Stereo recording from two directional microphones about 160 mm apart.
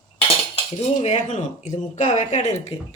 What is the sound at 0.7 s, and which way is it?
A woman's voice, 45° left (ahead or behind).